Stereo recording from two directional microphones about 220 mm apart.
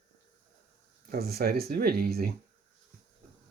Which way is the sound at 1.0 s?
45° right (ahead or behind).